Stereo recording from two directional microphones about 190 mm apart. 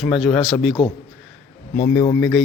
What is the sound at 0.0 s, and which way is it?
Speech, centre (ahead or behind).